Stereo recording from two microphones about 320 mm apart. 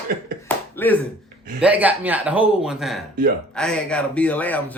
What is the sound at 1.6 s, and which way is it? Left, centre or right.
Speech, centre.